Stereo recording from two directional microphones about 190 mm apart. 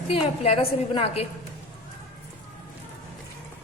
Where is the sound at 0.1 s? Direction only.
30° left (ahead or behind).